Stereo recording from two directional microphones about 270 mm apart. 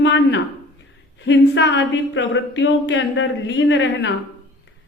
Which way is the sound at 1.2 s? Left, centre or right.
Left.